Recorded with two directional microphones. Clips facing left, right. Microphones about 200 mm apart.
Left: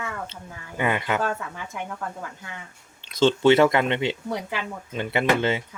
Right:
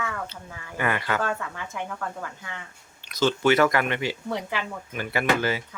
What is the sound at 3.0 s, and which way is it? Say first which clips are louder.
Speech: left 4 dB; 25° left (ahead or behind).